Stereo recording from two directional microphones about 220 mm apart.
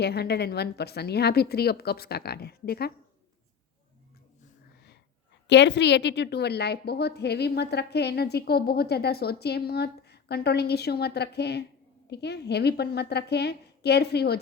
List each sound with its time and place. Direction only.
0.0 s a woman's voice: 50° left (ahead or behind)
5.5 s a woman's voice: 50° left (ahead or behind)